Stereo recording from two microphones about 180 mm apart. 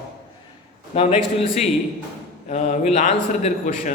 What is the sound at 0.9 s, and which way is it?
Speech, 35° left (ahead or behind).